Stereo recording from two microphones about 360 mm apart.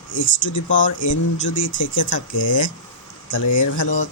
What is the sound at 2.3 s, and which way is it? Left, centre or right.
Speech, left.